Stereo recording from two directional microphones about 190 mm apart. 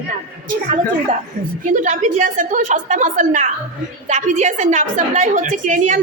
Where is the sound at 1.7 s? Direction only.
40° right (ahead or behind).